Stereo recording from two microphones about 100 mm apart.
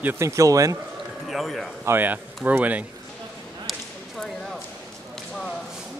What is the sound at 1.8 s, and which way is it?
Speech, 20° right (ahead or behind).